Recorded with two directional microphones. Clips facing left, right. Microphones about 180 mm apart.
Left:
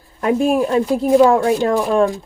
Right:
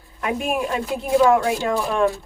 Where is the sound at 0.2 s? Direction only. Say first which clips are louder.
Left 8 dB; 35° left (ahead or behind).